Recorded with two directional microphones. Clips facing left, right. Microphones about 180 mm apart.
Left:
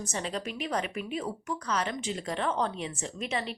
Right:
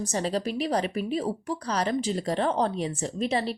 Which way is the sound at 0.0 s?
35° right (ahead or behind).